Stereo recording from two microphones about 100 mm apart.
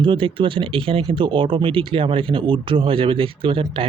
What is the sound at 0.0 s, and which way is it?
Speech, 60° right (ahead or behind).